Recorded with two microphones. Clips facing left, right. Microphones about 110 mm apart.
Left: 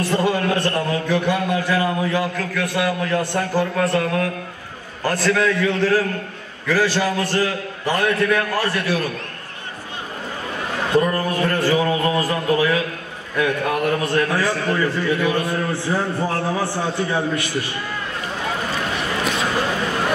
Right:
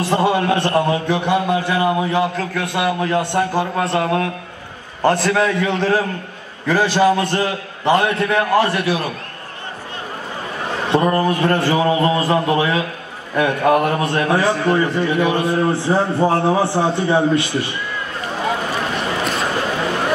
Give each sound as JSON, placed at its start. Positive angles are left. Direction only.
{"t": 0.0, "sound": "a man's voice", "side_deg": -25}
{"t": 10.9, "sound": "a man's voice", "side_deg": -30}
{"t": 18.9, "sound": "a sound", "side_deg": 0}